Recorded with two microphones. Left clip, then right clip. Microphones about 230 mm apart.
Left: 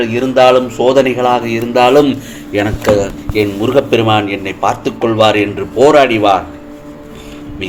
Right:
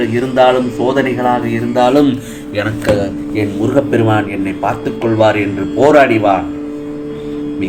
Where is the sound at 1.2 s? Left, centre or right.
Left.